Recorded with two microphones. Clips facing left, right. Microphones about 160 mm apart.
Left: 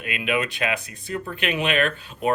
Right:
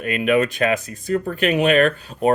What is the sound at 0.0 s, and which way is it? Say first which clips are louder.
Speech: right 7 dB; 45° right (ahead or behind).